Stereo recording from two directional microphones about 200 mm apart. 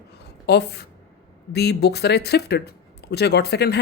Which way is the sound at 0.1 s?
55° left (ahead or behind).